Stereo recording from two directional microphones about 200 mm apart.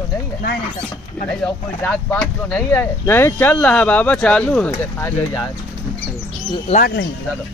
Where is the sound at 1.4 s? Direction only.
5° left (ahead or behind).